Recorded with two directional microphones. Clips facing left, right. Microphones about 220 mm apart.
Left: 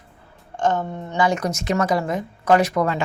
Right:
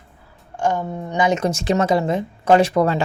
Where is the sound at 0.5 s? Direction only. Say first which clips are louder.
Even; 10° right (ahead or behind).